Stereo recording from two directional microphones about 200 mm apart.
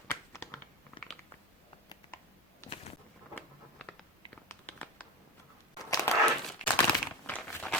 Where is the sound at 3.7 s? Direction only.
5° left (ahead or behind).